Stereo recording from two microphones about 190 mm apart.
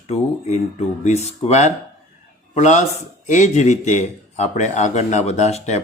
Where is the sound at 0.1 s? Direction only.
35° left (ahead or behind).